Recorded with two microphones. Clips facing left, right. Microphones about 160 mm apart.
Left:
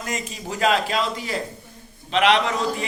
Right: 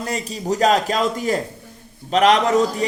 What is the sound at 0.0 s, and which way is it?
A man's voice, 35° right (ahead or behind).